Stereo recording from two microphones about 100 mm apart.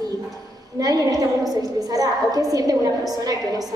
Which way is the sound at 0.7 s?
35° right (ahead or behind).